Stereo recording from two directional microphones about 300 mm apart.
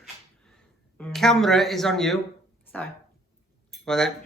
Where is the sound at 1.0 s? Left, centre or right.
Centre.